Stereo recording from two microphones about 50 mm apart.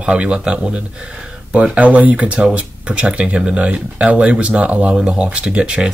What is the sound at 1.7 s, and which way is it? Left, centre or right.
Speech, right.